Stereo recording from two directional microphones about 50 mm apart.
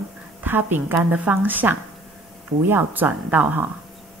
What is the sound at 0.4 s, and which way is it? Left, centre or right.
A woman's voice, right.